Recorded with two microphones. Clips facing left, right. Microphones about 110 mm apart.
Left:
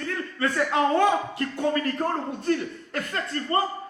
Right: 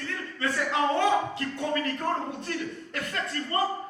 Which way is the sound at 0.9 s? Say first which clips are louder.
Left 3 dB; 45° left (ahead or behind).